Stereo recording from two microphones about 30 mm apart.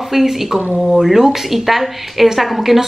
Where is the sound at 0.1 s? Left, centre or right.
Centre.